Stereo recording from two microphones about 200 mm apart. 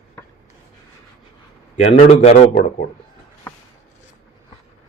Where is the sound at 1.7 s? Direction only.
30° left (ahead or behind).